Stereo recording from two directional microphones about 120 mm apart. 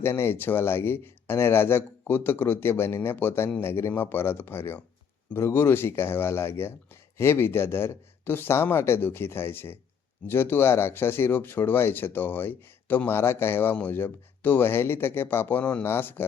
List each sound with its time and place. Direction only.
0.0 s speech: 20° left (ahead or behind)